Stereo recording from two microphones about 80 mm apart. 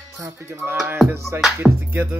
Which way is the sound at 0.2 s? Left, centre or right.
Right.